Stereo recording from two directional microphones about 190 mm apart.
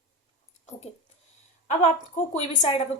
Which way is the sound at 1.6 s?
35° left (ahead or behind).